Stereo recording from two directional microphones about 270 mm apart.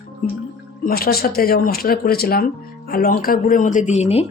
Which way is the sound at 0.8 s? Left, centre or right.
Left.